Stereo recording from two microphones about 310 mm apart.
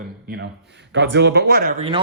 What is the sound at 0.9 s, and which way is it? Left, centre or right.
Speech, right.